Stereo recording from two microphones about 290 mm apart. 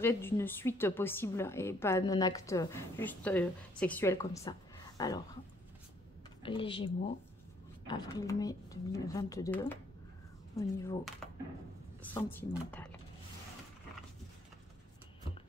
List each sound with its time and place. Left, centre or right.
0.0 s a woman's voice: centre
6.4 s a woman's voice: centre